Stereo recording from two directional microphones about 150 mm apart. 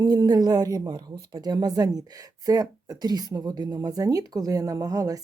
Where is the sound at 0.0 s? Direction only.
25° right (ahead or behind).